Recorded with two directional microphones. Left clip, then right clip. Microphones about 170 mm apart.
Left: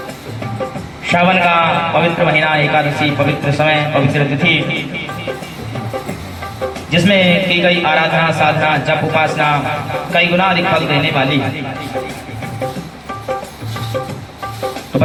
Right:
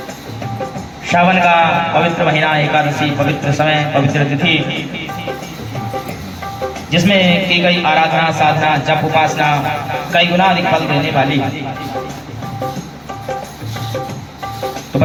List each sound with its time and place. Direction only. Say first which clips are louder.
1.0 s a man's voice: right 1 dB; 25° left (ahead or behind)
6.9 s a man's voice: left 1 dB; 25° left (ahead or behind)